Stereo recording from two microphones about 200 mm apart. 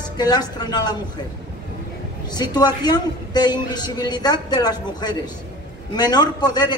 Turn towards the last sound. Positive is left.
turn(degrees=20)  # may be behind; listen again after turning